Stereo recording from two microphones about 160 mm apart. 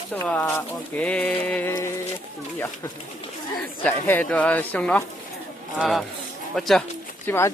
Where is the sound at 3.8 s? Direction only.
10° left (ahead or behind).